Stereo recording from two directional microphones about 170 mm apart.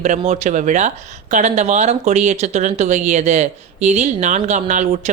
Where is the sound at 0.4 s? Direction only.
45° right (ahead or behind).